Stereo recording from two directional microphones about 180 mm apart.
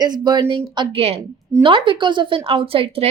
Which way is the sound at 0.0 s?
20° right (ahead or behind).